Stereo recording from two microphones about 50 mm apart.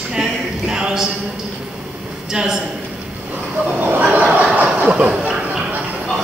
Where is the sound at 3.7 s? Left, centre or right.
Right.